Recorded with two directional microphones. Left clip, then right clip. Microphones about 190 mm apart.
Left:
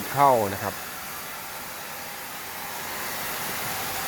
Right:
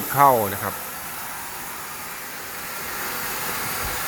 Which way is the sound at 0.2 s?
5° left (ahead or behind).